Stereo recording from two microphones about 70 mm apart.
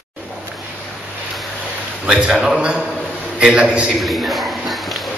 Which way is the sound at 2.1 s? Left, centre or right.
Centre.